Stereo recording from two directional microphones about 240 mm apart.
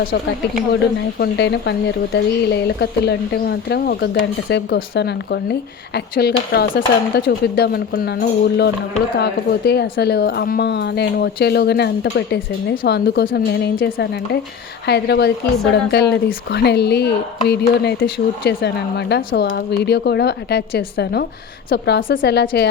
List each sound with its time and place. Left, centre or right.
1.2 s speech: left